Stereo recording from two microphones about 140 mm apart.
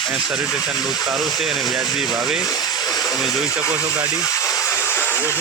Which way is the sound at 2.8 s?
25° left (ahead or behind).